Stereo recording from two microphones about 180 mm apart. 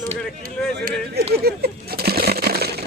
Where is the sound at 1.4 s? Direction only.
60° right (ahead or behind).